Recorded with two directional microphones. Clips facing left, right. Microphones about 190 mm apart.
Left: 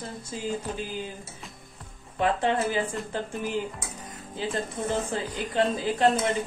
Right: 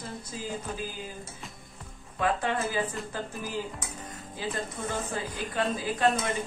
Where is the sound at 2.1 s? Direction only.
25° left (ahead or behind).